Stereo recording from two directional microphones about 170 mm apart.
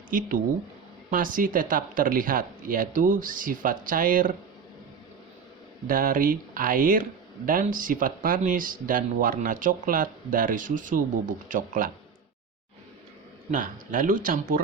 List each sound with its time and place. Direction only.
0.1 s speech: 55° right (ahead or behind)
5.9 s speech: 55° right (ahead or behind)
13.5 s speech: 50° right (ahead or behind)